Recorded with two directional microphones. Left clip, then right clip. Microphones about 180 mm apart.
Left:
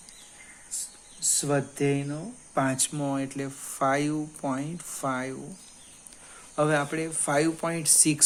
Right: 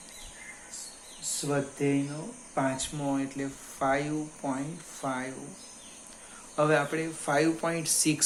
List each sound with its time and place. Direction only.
1.4 s speech: 65° left (ahead or behind)
6.6 s speech: 50° left (ahead or behind)